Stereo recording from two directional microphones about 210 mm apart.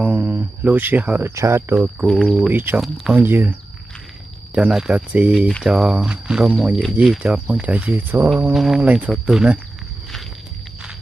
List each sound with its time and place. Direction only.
0.0 s speech: 10° right (ahead or behind)
4.6 s speech: 5° right (ahead or behind)